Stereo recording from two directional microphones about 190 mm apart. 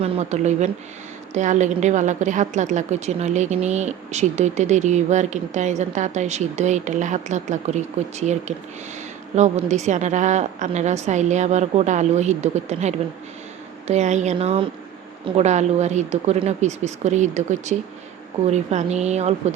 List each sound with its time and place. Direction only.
0.0 s a woman's voice: 35° right (ahead or behind)